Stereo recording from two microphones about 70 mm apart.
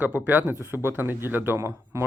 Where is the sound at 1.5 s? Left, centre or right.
Right.